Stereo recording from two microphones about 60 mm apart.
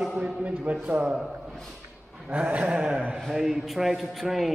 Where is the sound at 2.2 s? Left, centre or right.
Right.